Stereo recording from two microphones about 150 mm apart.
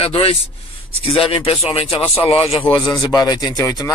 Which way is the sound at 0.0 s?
40° left (ahead or behind).